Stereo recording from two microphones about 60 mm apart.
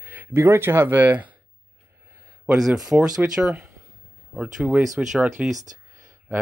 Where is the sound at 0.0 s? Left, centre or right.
Right.